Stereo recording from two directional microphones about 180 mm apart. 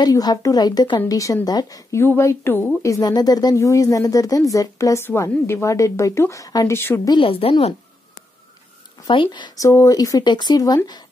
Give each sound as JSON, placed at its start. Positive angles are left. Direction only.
{"t": 0.0, "sound": "a woman's voice", "side_deg": 20}
{"t": 7.2, "sound": "a woman's voice", "side_deg": 30}
{"t": 9.0, "sound": "a woman's voice", "side_deg": 25}